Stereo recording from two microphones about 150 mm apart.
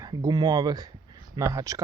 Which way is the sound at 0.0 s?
25° right (ahead or behind).